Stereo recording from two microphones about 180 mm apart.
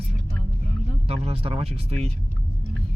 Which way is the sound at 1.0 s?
35° right (ahead or behind).